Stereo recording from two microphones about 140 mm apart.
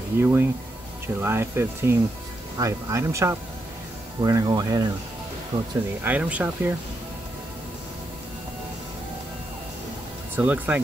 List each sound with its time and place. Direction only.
0.2 s speech: 15° right (ahead or behind)
6.0 s speech: 10° right (ahead or behind)
10.3 s speech: 10° right (ahead or behind)